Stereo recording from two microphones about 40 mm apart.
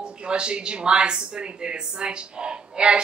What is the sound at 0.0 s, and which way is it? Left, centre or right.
A woman's voice, right.